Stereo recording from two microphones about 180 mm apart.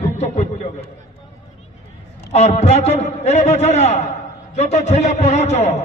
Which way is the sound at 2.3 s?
40° left (ahead or behind).